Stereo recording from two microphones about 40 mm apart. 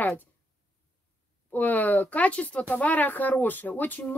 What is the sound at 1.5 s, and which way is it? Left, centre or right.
Speech, left.